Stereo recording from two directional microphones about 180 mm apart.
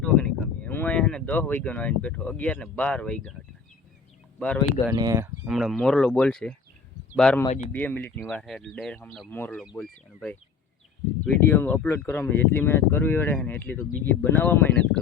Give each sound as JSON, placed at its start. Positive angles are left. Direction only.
{"t": 0.0, "sound": "speech", "side_deg": 5}
{"t": 4.4, "sound": "speech", "side_deg": 5}
{"t": 4.9, "sound": "speech", "side_deg": -20}
{"t": 5.5, "sound": "speech", "side_deg": 0}